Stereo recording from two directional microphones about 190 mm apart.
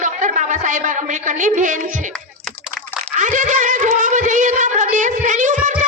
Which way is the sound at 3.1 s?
40° right (ahead or behind).